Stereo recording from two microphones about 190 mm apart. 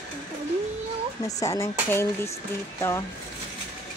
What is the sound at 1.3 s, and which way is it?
Speech, 15° left (ahead or behind).